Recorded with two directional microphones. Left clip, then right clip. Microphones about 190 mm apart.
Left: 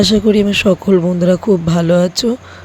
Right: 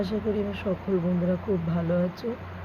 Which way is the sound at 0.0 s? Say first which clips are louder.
Left 16 dB; 55° left (ahead or behind).